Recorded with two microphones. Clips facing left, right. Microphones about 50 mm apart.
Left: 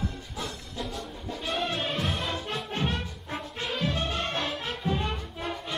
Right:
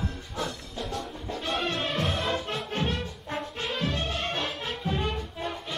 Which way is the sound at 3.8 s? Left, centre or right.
Centre.